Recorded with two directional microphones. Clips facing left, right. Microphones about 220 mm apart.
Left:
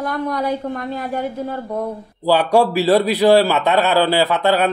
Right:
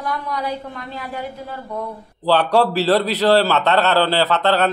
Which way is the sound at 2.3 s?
10° left (ahead or behind).